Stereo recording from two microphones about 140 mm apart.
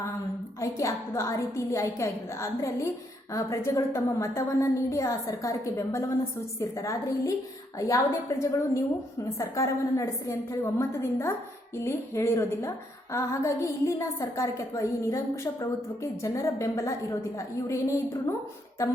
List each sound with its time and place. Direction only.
0.6 s a woman's voice: 20° left (ahead or behind)
16.2 s a woman's voice: 20° left (ahead or behind)